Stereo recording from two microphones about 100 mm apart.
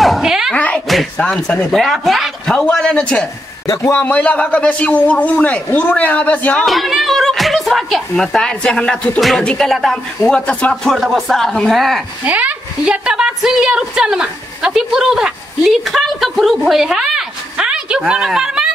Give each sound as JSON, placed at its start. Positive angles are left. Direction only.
{"t": 0.0, "sound": "a sound", "side_deg": 0}
{"t": 0.6, "sound": "a sound", "side_deg": 15}
{"t": 1.1, "sound": "a man's voice", "side_deg": 10}
{"t": 3.6, "sound": "a man's voice", "side_deg": 35}
{"t": 4.0, "sound": "a man's voice", "side_deg": 20}
{"t": 6.6, "sound": "speech", "side_deg": 0}
{"t": 12.3, "sound": "a woman's voice", "side_deg": -15}